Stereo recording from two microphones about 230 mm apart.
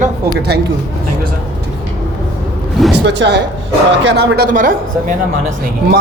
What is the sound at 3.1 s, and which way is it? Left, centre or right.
A man's voice, right.